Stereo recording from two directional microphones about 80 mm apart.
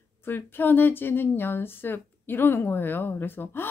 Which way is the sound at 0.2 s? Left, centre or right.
Left.